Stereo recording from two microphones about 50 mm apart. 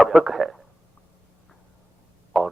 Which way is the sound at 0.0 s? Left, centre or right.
Centre.